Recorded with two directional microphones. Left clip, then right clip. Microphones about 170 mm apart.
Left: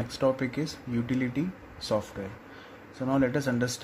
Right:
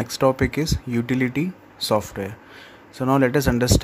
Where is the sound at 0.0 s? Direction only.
45° right (ahead or behind).